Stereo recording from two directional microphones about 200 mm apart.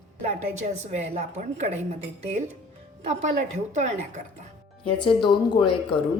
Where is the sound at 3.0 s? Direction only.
35° right (ahead or behind).